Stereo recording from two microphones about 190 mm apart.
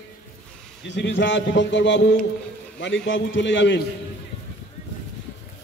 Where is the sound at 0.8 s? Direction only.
70° left (ahead or behind).